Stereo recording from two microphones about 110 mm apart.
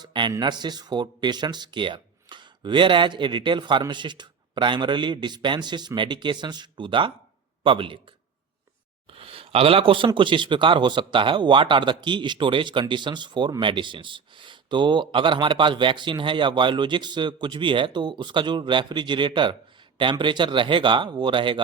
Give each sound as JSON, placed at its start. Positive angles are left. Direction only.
{"t": 0.0, "sound": "speech", "side_deg": -45}
{"t": 9.1, "sound": "a sound", "side_deg": -60}
{"t": 10.2, "sound": "speech", "side_deg": -50}